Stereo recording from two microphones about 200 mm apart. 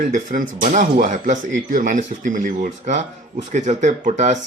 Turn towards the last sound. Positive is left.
turn(degrees=-35)  # may be behind; listen again after turning